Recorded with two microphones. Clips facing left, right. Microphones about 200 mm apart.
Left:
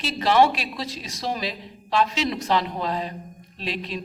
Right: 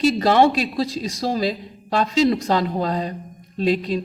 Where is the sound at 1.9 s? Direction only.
40° right (ahead or behind).